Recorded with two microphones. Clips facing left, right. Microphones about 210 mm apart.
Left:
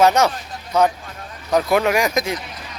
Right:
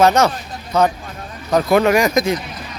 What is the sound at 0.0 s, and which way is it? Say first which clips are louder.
Speech: right 2 dB; 10° left (ahead or behind).